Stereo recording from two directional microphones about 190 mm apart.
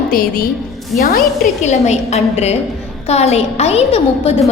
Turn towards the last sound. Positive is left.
turn(degrees=35)  # may be behind; listen again after turning